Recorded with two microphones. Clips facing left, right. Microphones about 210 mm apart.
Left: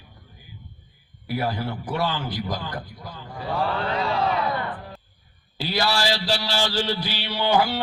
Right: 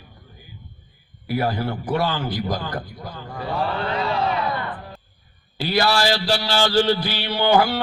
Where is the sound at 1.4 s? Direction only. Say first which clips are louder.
Right 4 dB; 55° right (ahead or behind).